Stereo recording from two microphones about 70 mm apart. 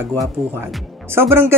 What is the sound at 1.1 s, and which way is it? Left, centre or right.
Speech, right.